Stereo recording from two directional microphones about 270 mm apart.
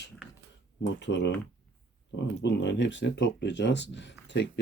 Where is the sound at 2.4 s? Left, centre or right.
Left.